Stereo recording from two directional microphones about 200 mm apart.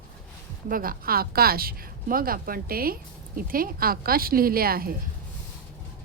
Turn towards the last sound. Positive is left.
turn(degrees=-50)  # may be behind; listen again after turning